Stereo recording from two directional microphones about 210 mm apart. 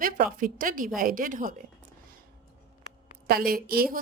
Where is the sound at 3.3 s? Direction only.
45° right (ahead or behind).